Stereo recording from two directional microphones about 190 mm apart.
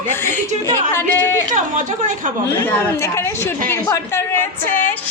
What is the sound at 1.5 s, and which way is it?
Speech, 45° right (ahead or behind).